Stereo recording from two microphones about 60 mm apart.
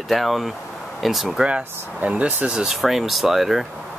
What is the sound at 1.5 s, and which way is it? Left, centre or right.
Speech, centre.